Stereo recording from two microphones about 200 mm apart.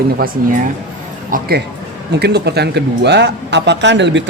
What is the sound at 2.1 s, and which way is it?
Speech, 55° right (ahead or behind).